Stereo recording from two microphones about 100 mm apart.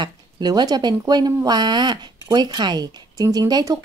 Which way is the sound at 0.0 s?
45° right (ahead or behind).